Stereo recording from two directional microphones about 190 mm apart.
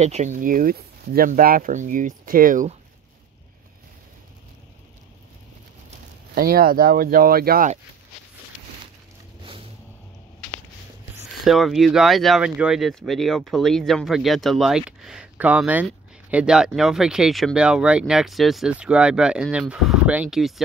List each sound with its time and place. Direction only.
0.0 s speech: 35° right (ahead or behind)
6.3 s speech: 50° right (ahead or behind)
9.4 s vehicle: 30° right (ahead or behind)
11.4 s speech: centre (ahead or behind)